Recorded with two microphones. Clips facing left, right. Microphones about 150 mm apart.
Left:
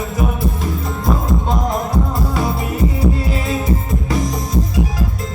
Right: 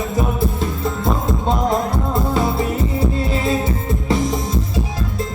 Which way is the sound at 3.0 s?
25° right (ahead or behind).